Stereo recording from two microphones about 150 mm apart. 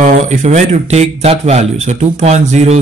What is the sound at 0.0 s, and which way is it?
A man's voice, 55° right (ahead or behind).